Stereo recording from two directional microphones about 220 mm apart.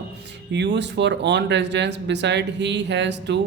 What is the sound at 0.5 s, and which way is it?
Speech, 55° right (ahead or behind).